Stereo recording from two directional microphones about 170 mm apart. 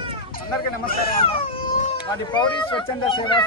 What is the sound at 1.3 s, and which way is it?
Speech, 35° left (ahead or behind).